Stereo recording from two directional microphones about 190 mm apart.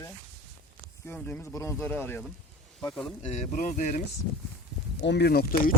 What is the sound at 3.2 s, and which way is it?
Speech, 35° left (ahead or behind).